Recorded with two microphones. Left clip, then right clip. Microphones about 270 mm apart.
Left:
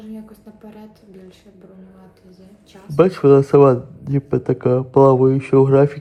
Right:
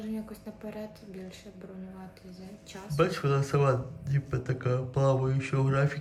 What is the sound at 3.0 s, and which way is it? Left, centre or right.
Speech, centre.